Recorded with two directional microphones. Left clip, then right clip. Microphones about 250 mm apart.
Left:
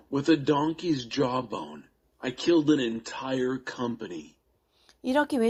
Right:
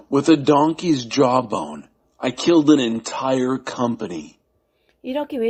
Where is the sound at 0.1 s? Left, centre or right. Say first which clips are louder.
Right 9 dB; right.